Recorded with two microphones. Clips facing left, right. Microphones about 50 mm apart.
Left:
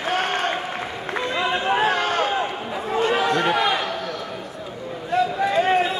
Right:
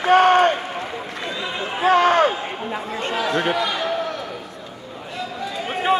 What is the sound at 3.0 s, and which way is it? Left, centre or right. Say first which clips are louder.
Chatter: left 2 dB; left.